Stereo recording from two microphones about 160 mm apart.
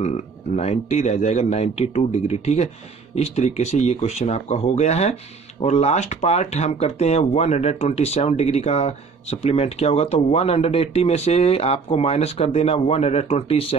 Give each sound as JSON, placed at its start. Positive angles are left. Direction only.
{"t": 0.0, "sound": "speech", "side_deg": 45}